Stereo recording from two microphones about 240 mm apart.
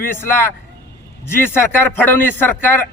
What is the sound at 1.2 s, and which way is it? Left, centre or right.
A man's voice, centre.